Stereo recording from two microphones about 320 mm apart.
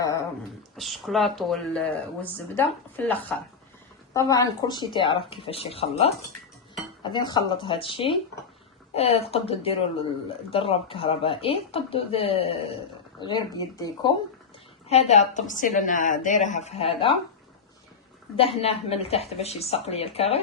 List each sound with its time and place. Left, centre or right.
0.0 s dog: centre
0.8 s a woman's voice: centre
18.3 s a woman's voice: centre